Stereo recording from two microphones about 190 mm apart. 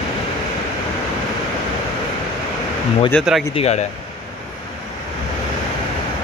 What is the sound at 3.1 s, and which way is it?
Speech, centre (ahead or behind).